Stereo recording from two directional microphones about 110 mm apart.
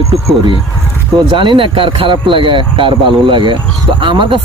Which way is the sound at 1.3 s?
45° right (ahead or behind).